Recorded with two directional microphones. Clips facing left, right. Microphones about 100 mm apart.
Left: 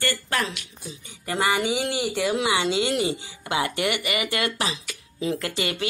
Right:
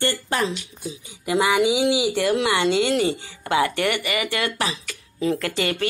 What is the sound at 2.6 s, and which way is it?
Speech, 50° right (ahead or behind).